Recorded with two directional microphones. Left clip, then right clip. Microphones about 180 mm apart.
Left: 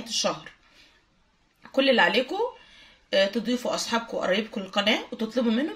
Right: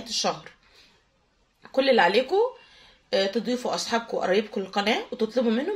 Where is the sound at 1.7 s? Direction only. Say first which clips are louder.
Right 1 dB; 30° right (ahead or behind).